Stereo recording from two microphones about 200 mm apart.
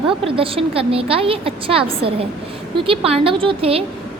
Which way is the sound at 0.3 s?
25° right (ahead or behind).